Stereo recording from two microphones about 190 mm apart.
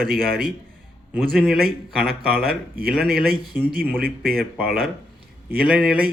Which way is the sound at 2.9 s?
Centre (ahead or behind).